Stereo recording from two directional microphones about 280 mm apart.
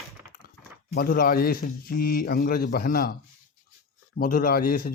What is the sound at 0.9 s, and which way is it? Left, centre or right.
A man's voice, left.